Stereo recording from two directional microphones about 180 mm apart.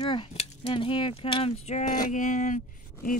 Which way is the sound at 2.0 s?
45° left (ahead or behind).